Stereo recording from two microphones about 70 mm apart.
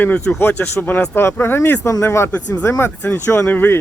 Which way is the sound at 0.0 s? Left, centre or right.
Left.